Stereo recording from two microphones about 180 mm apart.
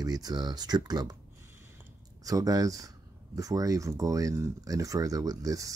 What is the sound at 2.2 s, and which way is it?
Speech, 20° right (ahead or behind).